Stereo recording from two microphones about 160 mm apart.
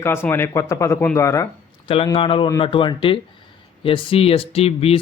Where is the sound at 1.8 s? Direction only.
30° left (ahead or behind).